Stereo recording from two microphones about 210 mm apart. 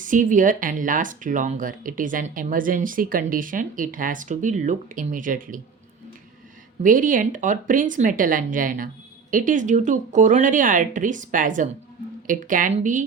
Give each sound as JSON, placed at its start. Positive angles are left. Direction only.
{"t": 0.0, "sound": "speech", "side_deg": -40}
{"t": 6.8, "sound": "speech", "side_deg": -40}